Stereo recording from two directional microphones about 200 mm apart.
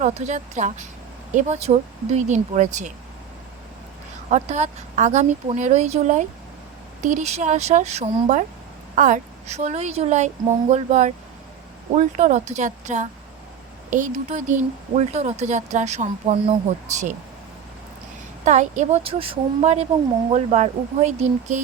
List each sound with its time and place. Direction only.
0.0 s speech: 35° right (ahead or behind)
4.3 s speech: 35° right (ahead or behind)
18.4 s speech: 35° right (ahead or behind)